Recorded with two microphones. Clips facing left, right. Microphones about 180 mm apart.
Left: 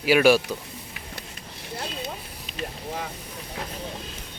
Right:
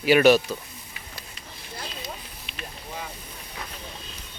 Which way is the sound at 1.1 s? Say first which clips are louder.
Left 3 dB; 60° left (ahead or behind).